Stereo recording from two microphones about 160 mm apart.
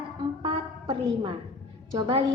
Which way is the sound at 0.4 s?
30° right (ahead or behind).